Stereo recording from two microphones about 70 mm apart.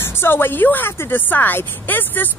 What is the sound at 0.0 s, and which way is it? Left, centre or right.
A woman's voice, left.